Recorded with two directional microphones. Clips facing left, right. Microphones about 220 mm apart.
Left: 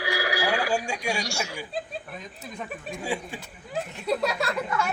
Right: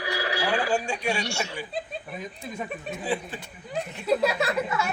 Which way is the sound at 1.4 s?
5° left (ahead or behind).